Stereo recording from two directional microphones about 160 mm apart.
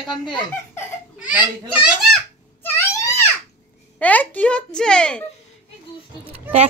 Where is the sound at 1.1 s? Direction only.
5° right (ahead or behind).